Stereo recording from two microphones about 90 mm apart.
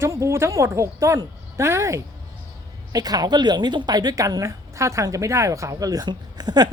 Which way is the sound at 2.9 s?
45° right (ahead or behind).